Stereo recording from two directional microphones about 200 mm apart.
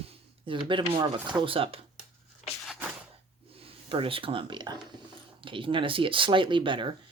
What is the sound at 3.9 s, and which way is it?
Speech, 25° right (ahead or behind).